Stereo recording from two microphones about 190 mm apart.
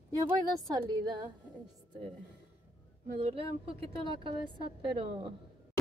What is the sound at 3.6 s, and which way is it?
Speech, 30° right (ahead or behind).